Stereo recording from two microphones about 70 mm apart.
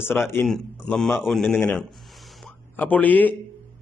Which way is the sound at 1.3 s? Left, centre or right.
Centre.